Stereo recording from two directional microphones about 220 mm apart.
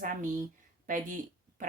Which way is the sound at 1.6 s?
35° right (ahead or behind).